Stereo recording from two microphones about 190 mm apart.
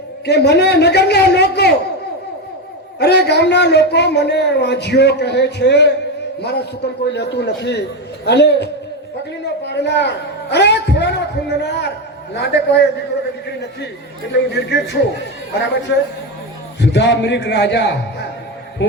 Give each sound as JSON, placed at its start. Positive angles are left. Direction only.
{"t": 0.3, "sound": "a man's voice", "side_deg": 60}
{"t": 3.0, "sound": "a man's voice", "side_deg": 60}
{"t": 14.3, "sound": "a man's voice", "side_deg": 60}
{"t": 16.8, "sound": "a man's voice", "side_deg": 65}